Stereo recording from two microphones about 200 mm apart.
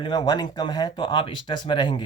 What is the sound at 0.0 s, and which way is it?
Speech, 20° left (ahead or behind).